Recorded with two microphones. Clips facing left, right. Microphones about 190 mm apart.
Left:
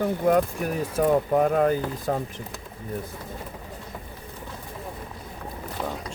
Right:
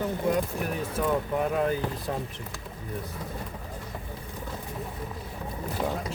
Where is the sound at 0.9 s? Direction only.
50° left (ahead or behind).